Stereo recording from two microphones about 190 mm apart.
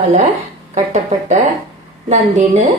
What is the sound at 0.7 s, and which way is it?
A woman's voice, 35° right (ahead or behind).